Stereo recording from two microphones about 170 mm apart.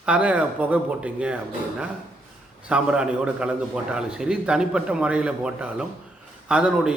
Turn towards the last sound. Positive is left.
turn(degrees=-5)  # may be behind; listen again after turning